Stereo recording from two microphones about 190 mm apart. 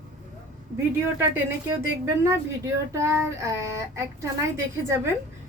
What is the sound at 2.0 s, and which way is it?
Speech, 15° right (ahead or behind).